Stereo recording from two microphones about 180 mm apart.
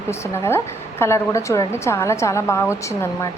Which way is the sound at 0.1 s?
15° left (ahead or behind).